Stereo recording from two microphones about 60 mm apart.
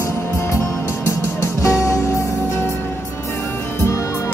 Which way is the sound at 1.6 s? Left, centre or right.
Left.